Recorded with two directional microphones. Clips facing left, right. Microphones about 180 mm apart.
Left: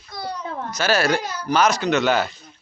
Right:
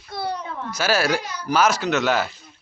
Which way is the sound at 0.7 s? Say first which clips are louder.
Left 1 dB; 5° right (ahead or behind).